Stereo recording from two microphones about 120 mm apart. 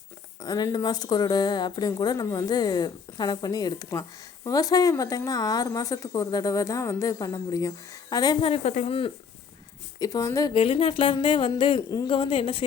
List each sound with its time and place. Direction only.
0.4 s a woman's voice: 35° left (ahead or behind)
8.4 s speech: 50° left (ahead or behind)
10.0 s speech: 30° left (ahead or behind)
10.5 s speech: 50° left (ahead or behind)